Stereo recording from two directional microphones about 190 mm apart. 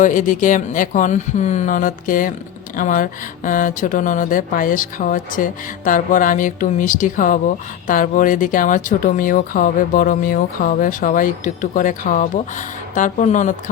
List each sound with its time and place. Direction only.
0.0 s speech: 45° left (ahead or behind)